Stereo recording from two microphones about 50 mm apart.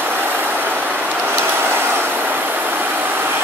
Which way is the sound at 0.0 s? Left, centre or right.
Right.